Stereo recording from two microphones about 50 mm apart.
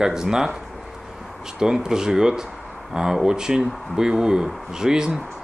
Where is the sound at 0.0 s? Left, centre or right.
Centre.